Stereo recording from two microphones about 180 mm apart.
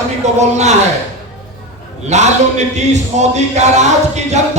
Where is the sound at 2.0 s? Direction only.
40° right (ahead or behind).